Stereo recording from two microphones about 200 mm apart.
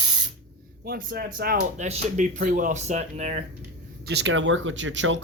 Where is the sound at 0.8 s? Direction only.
50° right (ahead or behind).